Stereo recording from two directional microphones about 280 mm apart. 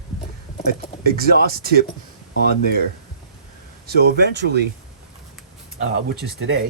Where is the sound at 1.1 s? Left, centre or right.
Right.